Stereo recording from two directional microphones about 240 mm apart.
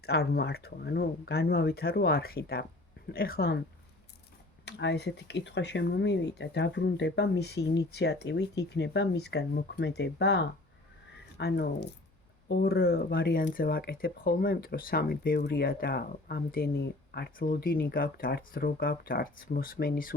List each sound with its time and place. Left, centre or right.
0.0 s speech: left
4.6 s speech: left